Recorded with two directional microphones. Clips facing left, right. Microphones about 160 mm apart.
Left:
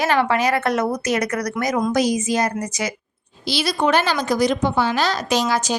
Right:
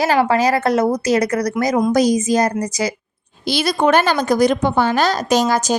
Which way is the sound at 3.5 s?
50° right (ahead or behind).